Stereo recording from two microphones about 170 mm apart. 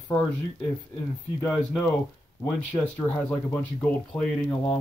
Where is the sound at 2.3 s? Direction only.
10° left (ahead or behind).